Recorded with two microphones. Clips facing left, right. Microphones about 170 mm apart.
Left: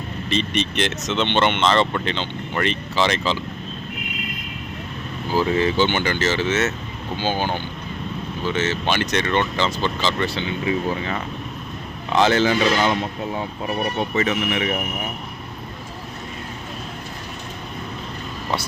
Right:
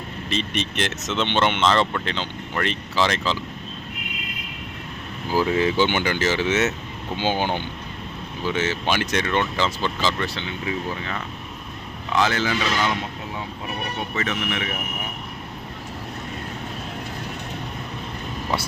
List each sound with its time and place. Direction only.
0.3 s speech: 5° right (ahead or behind)
5.3 s speech: 10° right (ahead or behind)
12.1 s speech: 25° left (ahead or behind)
14.2 s speech: 15° left (ahead or behind)